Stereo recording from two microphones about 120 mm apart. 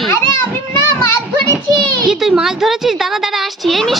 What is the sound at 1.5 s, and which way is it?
Speech, 35° right (ahead or behind).